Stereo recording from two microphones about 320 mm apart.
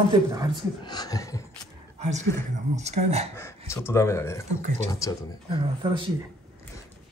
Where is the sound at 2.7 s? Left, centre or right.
Right.